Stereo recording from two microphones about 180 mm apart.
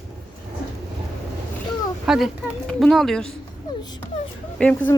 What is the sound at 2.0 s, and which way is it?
A woman's voice, 5° right (ahead or behind).